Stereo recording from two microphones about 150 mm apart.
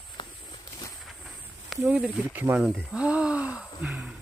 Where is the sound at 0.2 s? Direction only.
30° left (ahead or behind).